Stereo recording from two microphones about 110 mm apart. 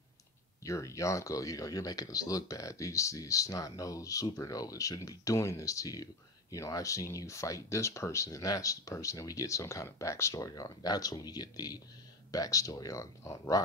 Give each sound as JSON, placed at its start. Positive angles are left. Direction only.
{"t": 0.7, "sound": "speech", "side_deg": 30}